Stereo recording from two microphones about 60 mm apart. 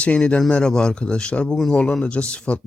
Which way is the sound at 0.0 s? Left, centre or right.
Left.